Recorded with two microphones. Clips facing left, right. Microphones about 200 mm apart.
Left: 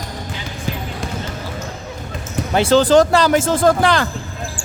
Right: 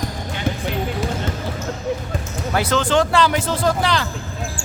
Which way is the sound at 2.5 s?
25° left (ahead or behind).